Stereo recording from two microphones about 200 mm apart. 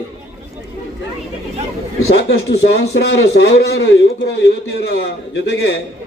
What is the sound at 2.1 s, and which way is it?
A man's voice, 55° left (ahead or behind).